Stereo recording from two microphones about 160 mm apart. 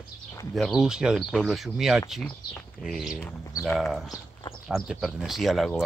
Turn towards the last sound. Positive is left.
turn(degrees=0)  # may be behind; listen again after turning